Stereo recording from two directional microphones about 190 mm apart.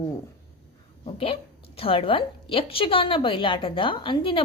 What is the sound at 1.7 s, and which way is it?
A woman's voice, 30° left (ahead or behind).